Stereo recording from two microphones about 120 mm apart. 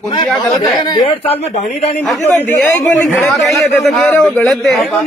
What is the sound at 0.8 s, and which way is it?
Speech, 35° left (ahead or behind).